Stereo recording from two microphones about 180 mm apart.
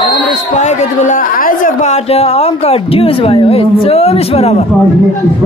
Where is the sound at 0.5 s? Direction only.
40° left (ahead or behind).